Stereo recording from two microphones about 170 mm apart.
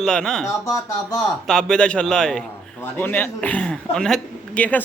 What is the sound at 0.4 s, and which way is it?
Speech, 15° left (ahead or behind).